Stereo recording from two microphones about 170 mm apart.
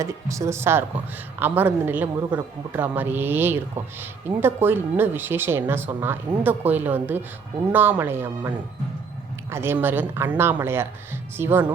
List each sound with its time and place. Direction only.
0.0 s speech: 20° right (ahead or behind)
9.5 s speech: 15° right (ahead or behind)